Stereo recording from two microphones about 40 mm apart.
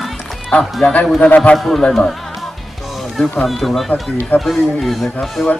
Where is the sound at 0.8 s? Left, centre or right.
Left.